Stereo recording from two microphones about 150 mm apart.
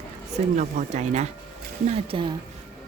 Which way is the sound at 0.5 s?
50° right (ahead or behind).